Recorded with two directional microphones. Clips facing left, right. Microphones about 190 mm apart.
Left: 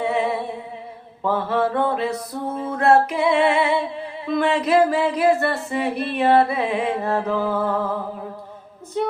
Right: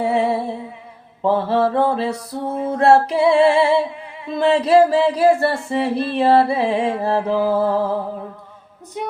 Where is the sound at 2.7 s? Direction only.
30° right (ahead or behind).